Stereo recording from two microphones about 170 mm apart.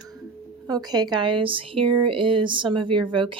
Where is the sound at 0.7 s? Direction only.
25° right (ahead or behind).